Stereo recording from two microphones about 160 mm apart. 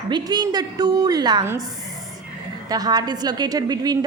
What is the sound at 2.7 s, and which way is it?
A woman's voice, 25° right (ahead or behind).